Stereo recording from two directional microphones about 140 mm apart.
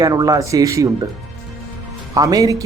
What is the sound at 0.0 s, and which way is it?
Speech, 25° right (ahead or behind).